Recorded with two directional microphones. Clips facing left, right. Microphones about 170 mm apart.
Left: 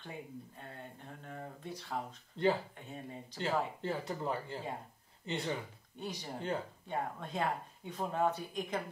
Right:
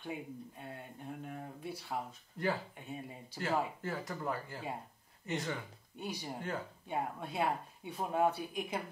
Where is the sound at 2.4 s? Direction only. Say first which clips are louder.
Left 4 dB; 25° left (ahead or behind).